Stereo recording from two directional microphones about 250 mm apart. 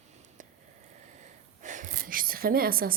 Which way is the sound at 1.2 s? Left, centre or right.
Right.